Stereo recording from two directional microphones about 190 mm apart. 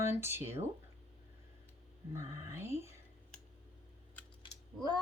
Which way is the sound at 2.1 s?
15° right (ahead or behind).